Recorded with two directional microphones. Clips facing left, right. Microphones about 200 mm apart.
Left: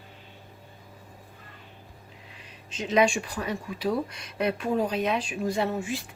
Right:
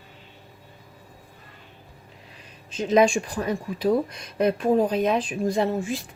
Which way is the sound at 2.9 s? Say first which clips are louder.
Right 4 dB; 40° right (ahead or behind).